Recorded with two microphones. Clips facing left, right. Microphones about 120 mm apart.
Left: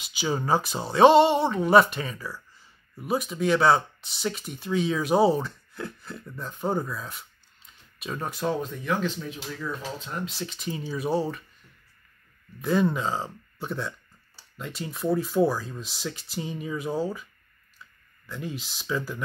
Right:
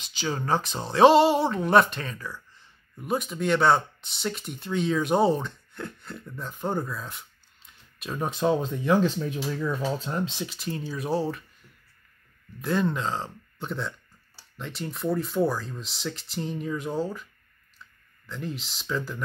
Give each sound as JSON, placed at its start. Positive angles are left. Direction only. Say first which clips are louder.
{"t": 0.0, "sound": "speech", "louder": "left 2 dB", "side_deg": 10}
{"t": 8.2, "sound": "speech", "louder": "right 4 dB", "side_deg": -20}
{"t": 10.4, "sound": "speech", "louder": "even", "side_deg": -5}
{"t": 12.6, "sound": "speech", "louder": "left 2 dB", "side_deg": 5}